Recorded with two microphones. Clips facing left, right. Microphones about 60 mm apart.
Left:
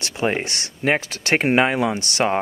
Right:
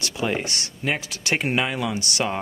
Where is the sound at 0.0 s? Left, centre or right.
Left.